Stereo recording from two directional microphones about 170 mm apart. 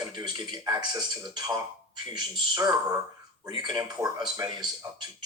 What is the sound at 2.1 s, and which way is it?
Speech, 25° right (ahead or behind).